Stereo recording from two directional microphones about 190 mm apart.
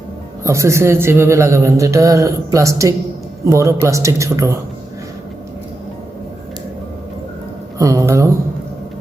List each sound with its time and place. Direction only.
0.4 s speech: 15° right (ahead or behind)
7.8 s speech: 15° right (ahead or behind)